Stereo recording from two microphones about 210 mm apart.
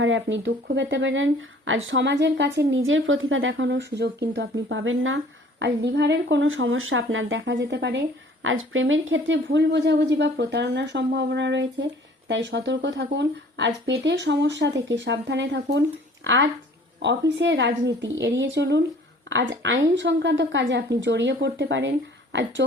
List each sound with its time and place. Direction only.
0.0 s speech: 65° right (ahead or behind)